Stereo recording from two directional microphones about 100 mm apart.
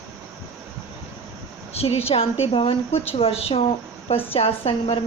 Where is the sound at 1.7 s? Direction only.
90° left.